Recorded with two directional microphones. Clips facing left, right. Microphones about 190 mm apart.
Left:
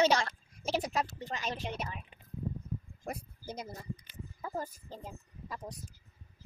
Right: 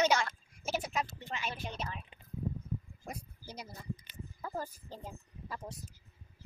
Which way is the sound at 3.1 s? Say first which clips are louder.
Left 5 dB; 50° left (ahead or behind).